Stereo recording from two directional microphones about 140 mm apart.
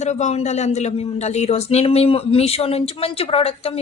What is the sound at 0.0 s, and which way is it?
A woman's voice, 55° left (ahead or behind).